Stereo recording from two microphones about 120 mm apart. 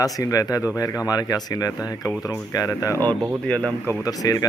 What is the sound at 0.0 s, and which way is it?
Speech, 30° left (ahead or behind).